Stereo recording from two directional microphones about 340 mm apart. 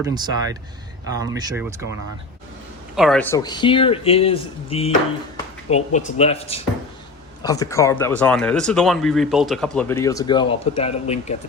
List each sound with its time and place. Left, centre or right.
0.0 s speech: centre
2.9 s speech: centre